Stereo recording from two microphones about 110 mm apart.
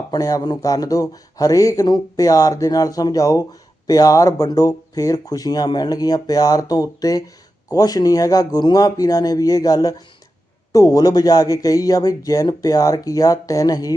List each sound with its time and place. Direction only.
0.1 s speech: 30° left (ahead or behind)